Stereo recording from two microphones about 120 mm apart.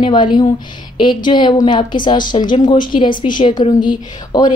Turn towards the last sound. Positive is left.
turn(degrees=35)  # may be behind; listen again after turning